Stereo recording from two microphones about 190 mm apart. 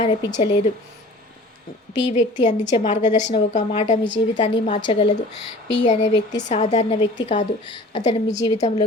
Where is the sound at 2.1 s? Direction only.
40° left (ahead or behind).